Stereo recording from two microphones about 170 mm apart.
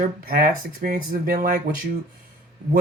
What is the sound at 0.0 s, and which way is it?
Speech, 60° right (ahead or behind).